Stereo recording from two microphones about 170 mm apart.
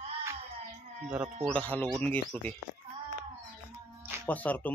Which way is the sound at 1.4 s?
5° left (ahead or behind).